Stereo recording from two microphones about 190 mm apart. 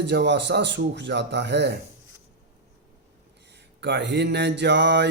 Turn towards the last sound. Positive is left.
turn(degrees=-65)  # may be behind; listen again after turning